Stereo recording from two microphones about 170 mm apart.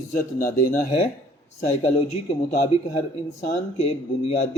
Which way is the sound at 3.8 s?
35° left (ahead or behind).